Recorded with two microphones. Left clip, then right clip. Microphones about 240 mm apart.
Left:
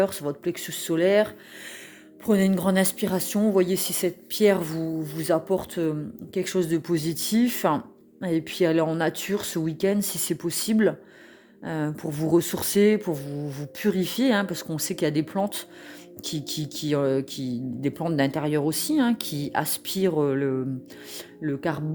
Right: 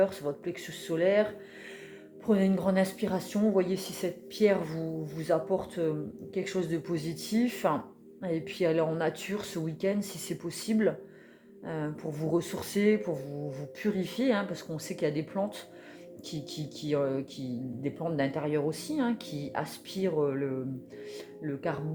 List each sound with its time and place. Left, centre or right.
0.0 s speech: left